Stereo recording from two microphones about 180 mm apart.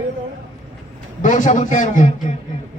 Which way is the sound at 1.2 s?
45° left (ahead or behind).